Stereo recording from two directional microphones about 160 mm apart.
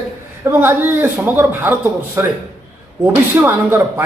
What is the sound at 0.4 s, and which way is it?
Speech, 15° right (ahead or behind).